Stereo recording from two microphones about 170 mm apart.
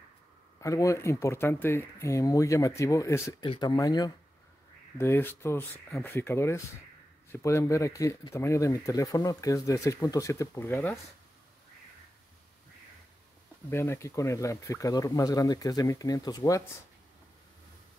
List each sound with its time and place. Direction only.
0.6 s speech: 20° left (ahead or behind)
13.7 s speech: 15° left (ahead or behind)